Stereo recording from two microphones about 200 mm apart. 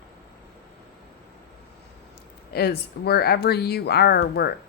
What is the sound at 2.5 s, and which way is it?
Speech, 50° left (ahead or behind).